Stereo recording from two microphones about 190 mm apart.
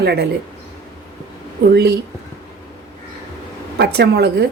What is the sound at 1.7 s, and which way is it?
Speech, 60° right (ahead or behind).